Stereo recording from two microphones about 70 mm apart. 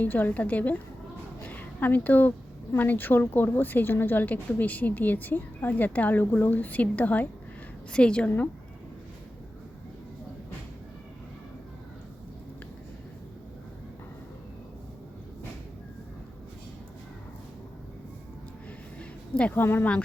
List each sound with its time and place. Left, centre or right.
0.0 s a woman's voice: left
1.4 s a sound: left
2.7 s a woman's voice: left
19.4 s a woman's voice: left